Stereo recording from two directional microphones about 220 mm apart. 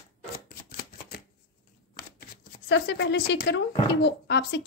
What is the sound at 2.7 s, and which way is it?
Speech, 55° left (ahead or behind).